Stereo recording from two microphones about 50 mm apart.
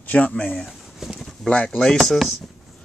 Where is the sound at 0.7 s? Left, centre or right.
Centre.